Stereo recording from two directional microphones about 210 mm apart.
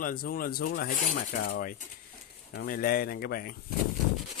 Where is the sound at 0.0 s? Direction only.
45° left (ahead or behind).